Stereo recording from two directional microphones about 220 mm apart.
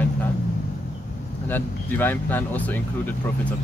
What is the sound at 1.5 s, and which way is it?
Speech, 10° left (ahead or behind).